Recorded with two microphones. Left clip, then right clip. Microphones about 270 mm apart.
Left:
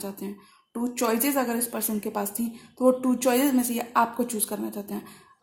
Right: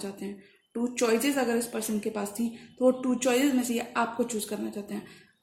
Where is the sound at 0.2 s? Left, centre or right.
Left.